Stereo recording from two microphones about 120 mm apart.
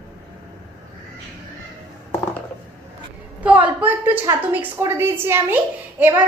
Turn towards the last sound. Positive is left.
turn(degrees=-15)  # may be behind; listen again after turning